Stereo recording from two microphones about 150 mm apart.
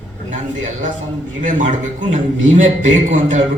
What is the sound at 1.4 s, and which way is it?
A man's voice, 55° right (ahead or behind).